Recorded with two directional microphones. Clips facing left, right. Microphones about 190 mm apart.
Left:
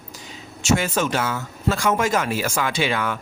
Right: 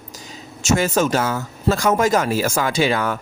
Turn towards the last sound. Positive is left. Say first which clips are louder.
# right 4 dB
turn(degrees=-40)  # may be behind; listen again after turning